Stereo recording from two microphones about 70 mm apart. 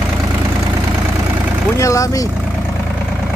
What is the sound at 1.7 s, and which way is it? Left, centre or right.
Speech, left.